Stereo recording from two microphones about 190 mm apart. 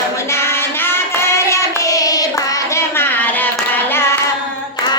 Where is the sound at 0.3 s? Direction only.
15° left (ahead or behind).